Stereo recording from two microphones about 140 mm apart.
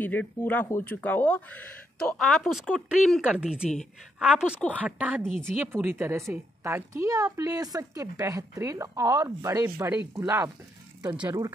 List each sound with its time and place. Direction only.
0.0 s a woman's voice: 10° left (ahead or behind); by 11.2 s 30° right (ahead or behind)